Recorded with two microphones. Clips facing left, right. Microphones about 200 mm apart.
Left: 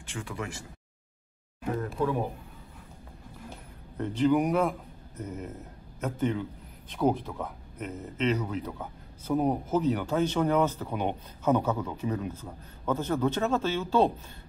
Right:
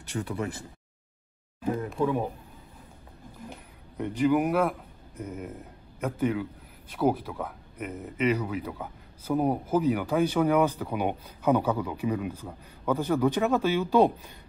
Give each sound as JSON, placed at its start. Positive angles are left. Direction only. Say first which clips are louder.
{"t": 0.1, "sound": "speech", "louder": "right 5 dB", "side_deg": -35}
{"t": 1.7, "sound": "speech", "louder": "right 2 dB", "side_deg": -15}
{"t": 3.4, "sound": "a man's voice", "louder": "right 1 dB", "side_deg": -15}